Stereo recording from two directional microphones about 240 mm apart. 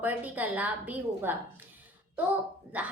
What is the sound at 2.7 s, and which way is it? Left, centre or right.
Speech, centre.